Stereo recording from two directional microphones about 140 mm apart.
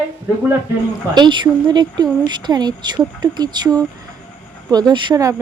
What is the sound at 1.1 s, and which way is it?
Speech, 30° right (ahead or behind).